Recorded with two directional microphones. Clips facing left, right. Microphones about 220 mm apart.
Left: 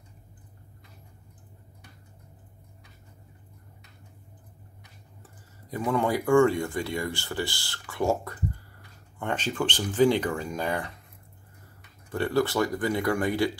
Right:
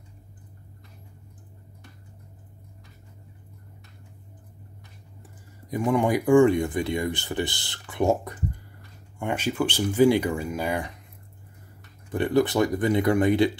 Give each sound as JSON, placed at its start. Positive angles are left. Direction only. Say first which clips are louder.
{"t": 5.9, "sound": "speech", "louder": "right 3 dB", "side_deg": -15}
{"t": 12.1, "sound": "speech", "louder": "right 3 dB", "side_deg": -20}